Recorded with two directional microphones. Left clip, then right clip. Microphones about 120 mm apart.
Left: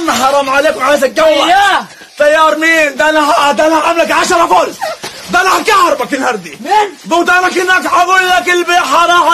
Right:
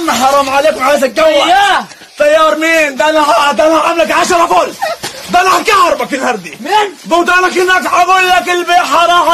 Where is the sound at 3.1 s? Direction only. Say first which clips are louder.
Right 1 dB; 40° left (ahead or behind).